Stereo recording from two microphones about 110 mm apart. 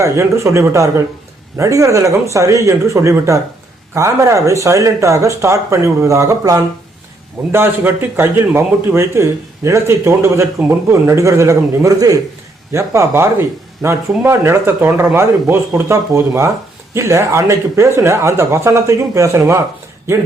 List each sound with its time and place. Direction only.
0.0 s a man's voice: 25° right (ahead or behind)